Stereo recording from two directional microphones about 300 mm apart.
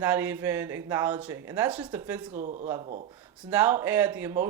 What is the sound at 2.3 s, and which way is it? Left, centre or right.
Speech, right.